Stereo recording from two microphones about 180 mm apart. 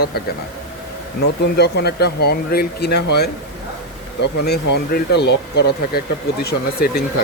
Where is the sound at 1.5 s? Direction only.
65° left (ahead or behind).